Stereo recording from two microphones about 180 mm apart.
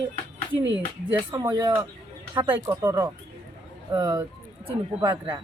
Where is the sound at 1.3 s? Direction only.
20° right (ahead or behind).